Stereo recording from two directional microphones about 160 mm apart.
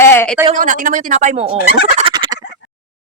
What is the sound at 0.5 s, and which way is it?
Speech, 55° right (ahead or behind).